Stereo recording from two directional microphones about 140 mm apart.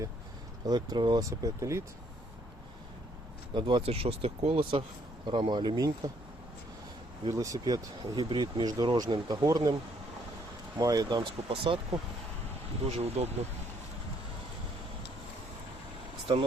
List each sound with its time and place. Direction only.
0.7 s speech: 30° right (ahead or behind)
3.5 s speech: 35° right (ahead or behind)
7.3 s speech: 25° right (ahead or behind)
10.8 s speech: 25° right (ahead or behind)
11.2 s speech: 40° right (ahead or behind)